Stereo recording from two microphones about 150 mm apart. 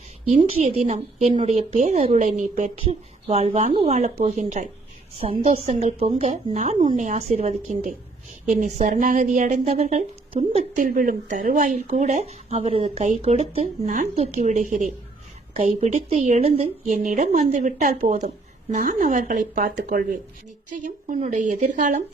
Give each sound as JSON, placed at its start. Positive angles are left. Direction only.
{"t": 0.3, "sound": "speech", "side_deg": -55}
{"t": 2.7, "sound": "speech", "side_deg": -40}
{"t": 5.2, "sound": "a woman's voice", "side_deg": -40}
{"t": 10.8, "sound": "a woman's voice", "side_deg": -65}